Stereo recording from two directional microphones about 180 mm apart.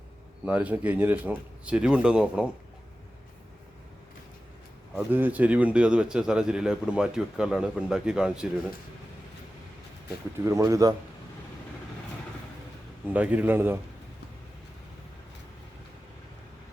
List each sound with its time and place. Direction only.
0.4 s speech: 10° right (ahead or behind)
4.9 s a man's voice: 10° right (ahead or behind)
10.4 s speech: 15° right (ahead or behind)
13.1 s speech: 10° right (ahead or behind)